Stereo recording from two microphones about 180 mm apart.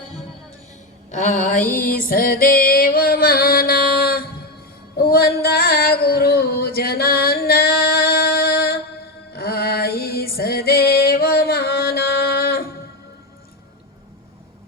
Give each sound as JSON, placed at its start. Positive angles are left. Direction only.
{"t": 1.1, "sound": "music", "side_deg": 45}
{"t": 4.9, "sound": "a sound", "side_deg": 60}
{"t": 9.3, "sound": "music", "side_deg": 60}